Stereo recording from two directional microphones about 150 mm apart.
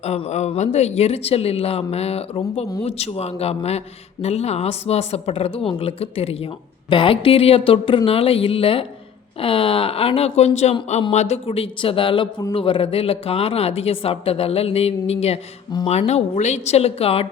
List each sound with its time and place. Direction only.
0.0 s speech: 45° left (ahead or behind)